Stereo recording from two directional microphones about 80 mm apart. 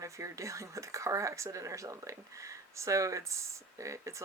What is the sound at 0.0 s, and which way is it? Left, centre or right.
Speech, right.